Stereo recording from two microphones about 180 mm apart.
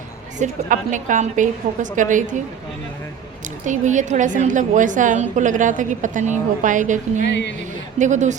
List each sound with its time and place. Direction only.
0.3 s a woman's voice: 45° right (ahead or behind)
3.7 s a woman's voice: 45° right (ahead or behind)
7.2 s speech: 70° left (ahead or behind)
7.9 s a woman's voice: 40° right (ahead or behind)